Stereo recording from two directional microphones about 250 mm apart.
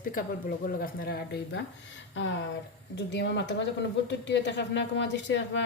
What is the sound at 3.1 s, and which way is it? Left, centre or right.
A woman's voice, left.